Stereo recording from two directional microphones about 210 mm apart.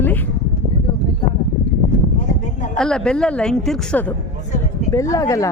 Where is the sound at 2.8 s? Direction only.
5° left (ahead or behind).